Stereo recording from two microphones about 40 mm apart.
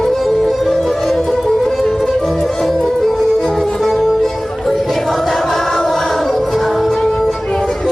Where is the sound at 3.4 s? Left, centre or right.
Centre.